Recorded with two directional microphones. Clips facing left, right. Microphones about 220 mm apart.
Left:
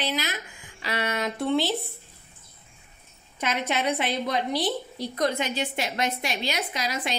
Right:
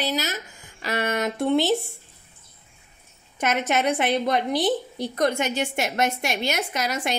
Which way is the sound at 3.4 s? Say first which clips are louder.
Right 4 dB; 50° right (ahead or behind).